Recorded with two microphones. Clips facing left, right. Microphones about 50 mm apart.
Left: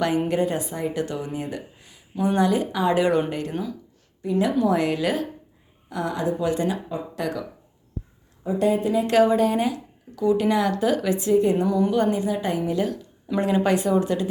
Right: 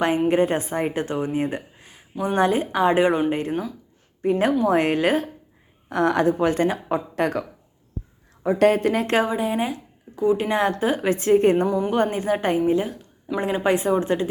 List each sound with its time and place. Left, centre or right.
0.3 s speech: right
4.2 s a woman's voice: right
5.9 s speech: right
8.4 s speech: right
9.3 s speech: centre
11.1 s speech: right
11.6 s speech: right
12.1 s speech: right
12.5 s speech: right